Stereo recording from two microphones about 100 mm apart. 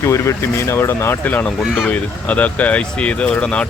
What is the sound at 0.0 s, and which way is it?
Speech, 30° left (ahead or behind).